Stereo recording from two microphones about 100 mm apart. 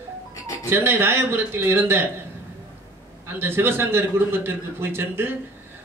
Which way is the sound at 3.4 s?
25° right (ahead or behind).